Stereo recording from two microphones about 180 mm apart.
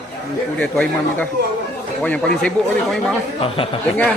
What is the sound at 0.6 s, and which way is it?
Speech, 5° left (ahead or behind).